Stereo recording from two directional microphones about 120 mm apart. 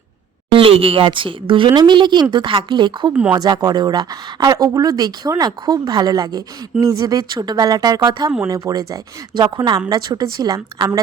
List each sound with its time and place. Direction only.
0.5 s speech: 50° right (ahead or behind)
3.1 s speech: 10° right (ahead or behind)
3.3 s speech: 35° right (ahead or behind)